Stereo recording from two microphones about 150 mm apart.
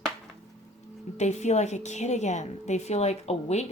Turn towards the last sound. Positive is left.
turn(degrees=45)  # may be behind; listen again after turning